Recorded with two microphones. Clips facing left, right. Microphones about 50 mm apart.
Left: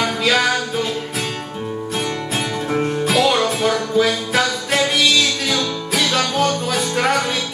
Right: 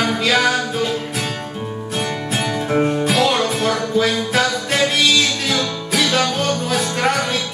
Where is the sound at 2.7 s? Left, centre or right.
Centre.